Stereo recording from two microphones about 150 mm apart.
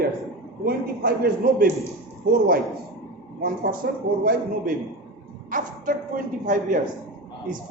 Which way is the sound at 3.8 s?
90° right.